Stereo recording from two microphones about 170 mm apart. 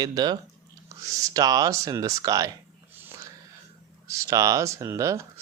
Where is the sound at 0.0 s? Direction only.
25° right (ahead or behind).